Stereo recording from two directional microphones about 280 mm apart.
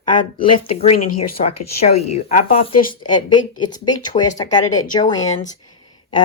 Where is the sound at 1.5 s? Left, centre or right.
Left.